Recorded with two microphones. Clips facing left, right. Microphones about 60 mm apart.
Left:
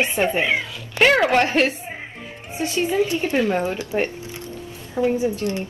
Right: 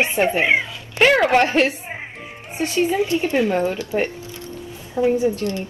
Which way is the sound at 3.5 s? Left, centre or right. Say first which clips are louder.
Right 2 dB; left.